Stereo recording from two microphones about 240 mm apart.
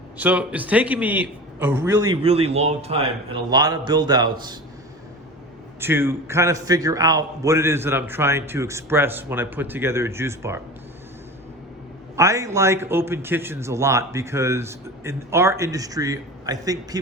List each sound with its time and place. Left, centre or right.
0.2 s a man's voice: centre
2.2 s a man's voice: right
5.8 s a man's voice: centre
12.1 s a man's voice: centre